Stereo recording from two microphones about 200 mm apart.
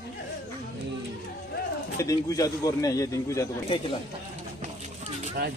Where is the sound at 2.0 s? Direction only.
15° left (ahead or behind).